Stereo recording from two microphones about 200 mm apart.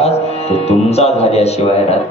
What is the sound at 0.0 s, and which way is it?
Speech, 30° left (ahead or behind).